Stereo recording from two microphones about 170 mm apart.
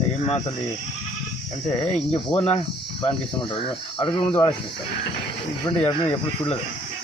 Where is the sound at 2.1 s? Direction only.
30° left (ahead or behind).